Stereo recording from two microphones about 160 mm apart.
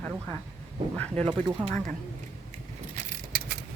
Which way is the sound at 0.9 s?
10° left (ahead or behind).